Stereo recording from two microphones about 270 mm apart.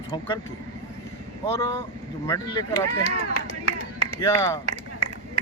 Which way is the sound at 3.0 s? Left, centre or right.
Left.